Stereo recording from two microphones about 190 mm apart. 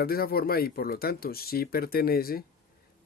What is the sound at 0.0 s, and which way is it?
Speech, 55° left (ahead or behind).